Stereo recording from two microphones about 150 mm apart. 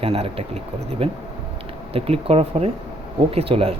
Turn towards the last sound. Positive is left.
turn(degrees=-40)  # may be behind; listen again after turning